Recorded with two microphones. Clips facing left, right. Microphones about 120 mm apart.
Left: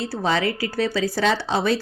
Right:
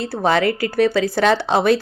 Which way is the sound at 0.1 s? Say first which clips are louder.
Right 7 dB; 60° right (ahead or behind).